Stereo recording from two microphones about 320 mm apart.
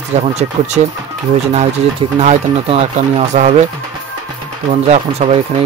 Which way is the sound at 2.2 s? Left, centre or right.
Centre.